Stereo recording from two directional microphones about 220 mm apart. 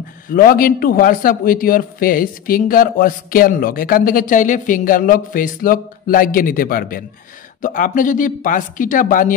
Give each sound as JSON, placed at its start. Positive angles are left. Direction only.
{"t": 0.3, "sound": "a man's voice", "side_deg": 40}